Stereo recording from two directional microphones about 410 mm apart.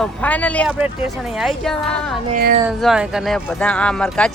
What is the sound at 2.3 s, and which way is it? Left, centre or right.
Speech, right.